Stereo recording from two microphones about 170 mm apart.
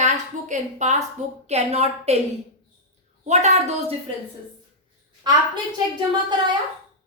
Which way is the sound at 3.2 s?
40° right (ahead or behind).